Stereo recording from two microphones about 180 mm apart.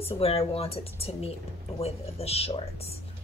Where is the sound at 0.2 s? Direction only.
30° left (ahead or behind).